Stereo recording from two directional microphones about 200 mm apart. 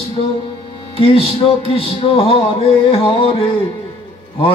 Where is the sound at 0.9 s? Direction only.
30° left (ahead or behind).